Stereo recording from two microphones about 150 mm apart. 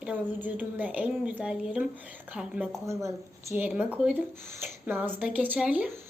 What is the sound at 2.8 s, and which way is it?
A woman's voice, 20° right (ahead or behind).